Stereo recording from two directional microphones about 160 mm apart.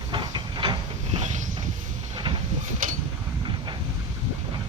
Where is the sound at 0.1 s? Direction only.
30° right (ahead or behind).